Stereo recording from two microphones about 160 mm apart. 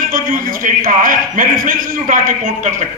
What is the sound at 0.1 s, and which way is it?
A man's voice, 60° right (ahead or behind).